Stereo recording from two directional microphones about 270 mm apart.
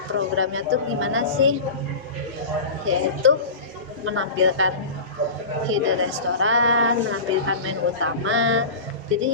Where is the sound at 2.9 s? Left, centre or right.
Right.